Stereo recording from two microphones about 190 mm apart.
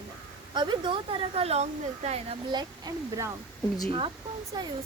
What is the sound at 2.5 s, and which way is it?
A woman's voice, 20° right (ahead or behind).